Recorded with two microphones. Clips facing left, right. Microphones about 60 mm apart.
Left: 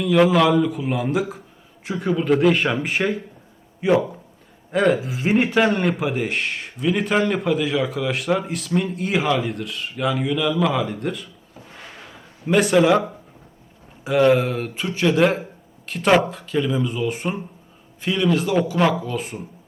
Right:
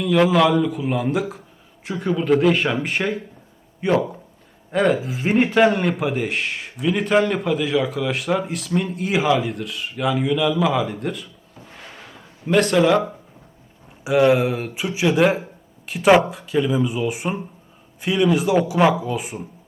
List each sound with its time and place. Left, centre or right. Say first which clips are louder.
0.0 s speech: even; centre
14.0 s speech: even; centre